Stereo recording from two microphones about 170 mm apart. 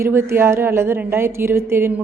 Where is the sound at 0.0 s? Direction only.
15° right (ahead or behind).